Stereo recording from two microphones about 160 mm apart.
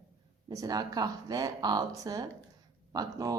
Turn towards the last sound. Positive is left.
turn(degrees=-20)  # may be behind; listen again after turning